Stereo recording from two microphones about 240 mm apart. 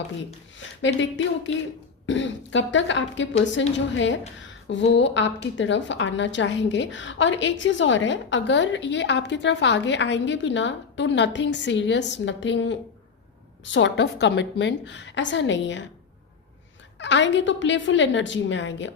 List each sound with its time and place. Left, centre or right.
0.8 s a woman's voice: left
17.0 s a woman's voice: left